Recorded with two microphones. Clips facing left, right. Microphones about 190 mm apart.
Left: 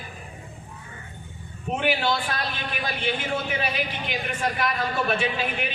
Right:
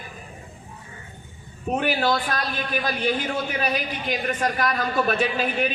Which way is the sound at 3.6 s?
45° right (ahead or behind).